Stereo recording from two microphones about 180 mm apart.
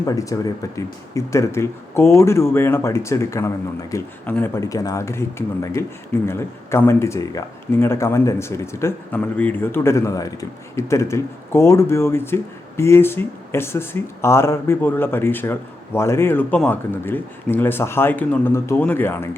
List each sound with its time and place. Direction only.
0.0 s speech: 20° left (ahead or behind)